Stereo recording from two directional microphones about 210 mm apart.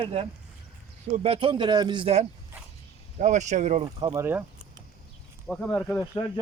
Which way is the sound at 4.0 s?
20° right (ahead or behind).